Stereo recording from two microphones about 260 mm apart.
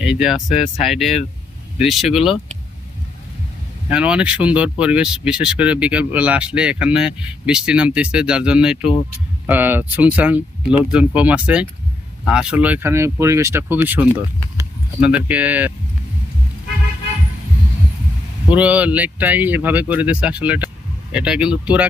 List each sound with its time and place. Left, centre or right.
0.0 s speech: centre
0.4 s speech: left
0.8 s speech: centre
3.8 s speech: centre
18.5 s speech: centre